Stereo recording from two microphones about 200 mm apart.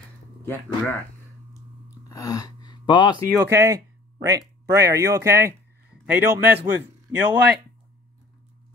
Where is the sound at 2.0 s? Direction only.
15° left (ahead or behind).